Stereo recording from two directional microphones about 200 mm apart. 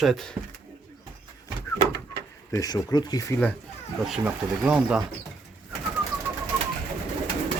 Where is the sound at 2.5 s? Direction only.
20° left (ahead or behind).